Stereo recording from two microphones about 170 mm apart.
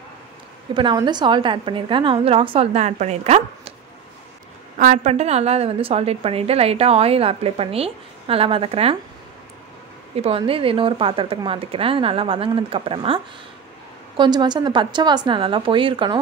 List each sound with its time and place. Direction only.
0.7 s a woman's voice: 25° right (ahead or behind)
4.7 s a woman's voice: 50° right (ahead or behind)
10.1 s a woman's voice: 35° right (ahead or behind)